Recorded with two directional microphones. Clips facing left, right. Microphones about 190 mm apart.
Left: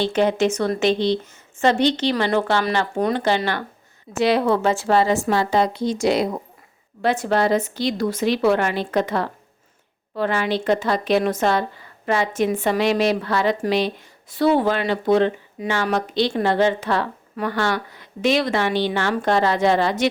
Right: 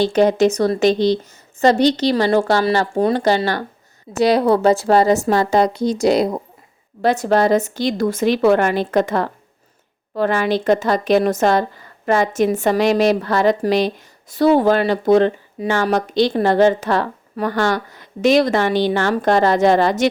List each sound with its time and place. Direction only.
0.0 s a woman's voice: 40° right (ahead or behind)